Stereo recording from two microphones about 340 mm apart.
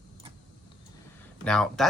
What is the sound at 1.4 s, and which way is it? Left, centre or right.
Speech, centre.